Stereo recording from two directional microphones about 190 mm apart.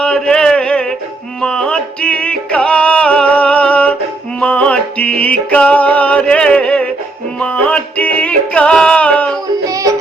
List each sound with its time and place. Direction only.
0.0 s a sound: 5° left (ahead or behind)
1.4 s music: 5° left (ahead or behind)
9.6 s music: 15° right (ahead or behind)